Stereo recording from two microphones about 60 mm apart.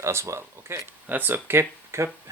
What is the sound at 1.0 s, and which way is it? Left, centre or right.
Speech, right.